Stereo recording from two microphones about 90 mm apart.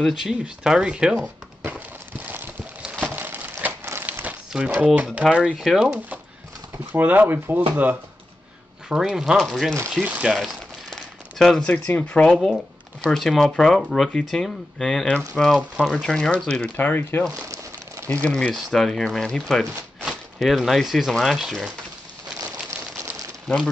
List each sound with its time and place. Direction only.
0.0 s speech: 5° right (ahead or behind)
1.6 s a sound: 20° right (ahead or behind)
4.0 s crumpling: 15° right (ahead or behind)
4.7 s speech: 10° right (ahead or behind)
7.0 s speech: 20° right (ahead or behind)
8.8 s speech: 5° right (ahead or behind)
10.0 s speech: 15° right (ahead or behind); by 12.3 s 20° left (ahead or behind)
12.3 s speech: centre (ahead or behind)
15.4 s speech: 5° right (ahead or behind)
16.1 s speech: 10° left (ahead or behind)
16.7 s speech: 20° left (ahead or behind)
18.5 s speech: 5° left (ahead or behind)
22.4 s crumpling: 35° right (ahead or behind)